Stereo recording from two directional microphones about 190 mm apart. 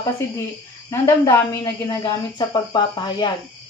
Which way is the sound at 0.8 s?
15° left (ahead or behind).